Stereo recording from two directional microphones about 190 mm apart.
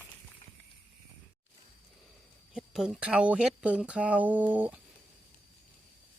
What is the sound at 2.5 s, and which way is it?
Speech, 5° right (ahead or behind).